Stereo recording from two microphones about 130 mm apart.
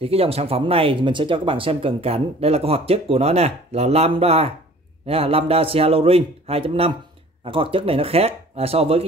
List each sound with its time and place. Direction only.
0.0 s speech: 50° right (ahead or behind)